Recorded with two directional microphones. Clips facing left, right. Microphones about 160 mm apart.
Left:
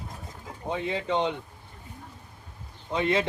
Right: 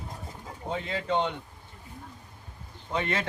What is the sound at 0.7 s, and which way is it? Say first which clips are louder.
Speech: left 1 dB; 15° left (ahead or behind).